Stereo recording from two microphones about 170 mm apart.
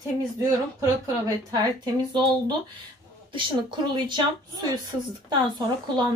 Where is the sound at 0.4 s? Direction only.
15° right (ahead or behind).